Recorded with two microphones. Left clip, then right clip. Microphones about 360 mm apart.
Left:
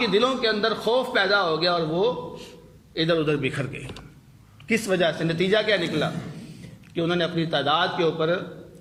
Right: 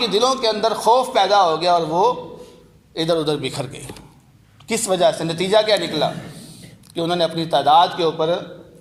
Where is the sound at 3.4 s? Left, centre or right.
Centre.